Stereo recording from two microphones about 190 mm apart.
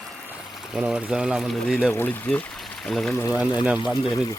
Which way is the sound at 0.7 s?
5° right (ahead or behind).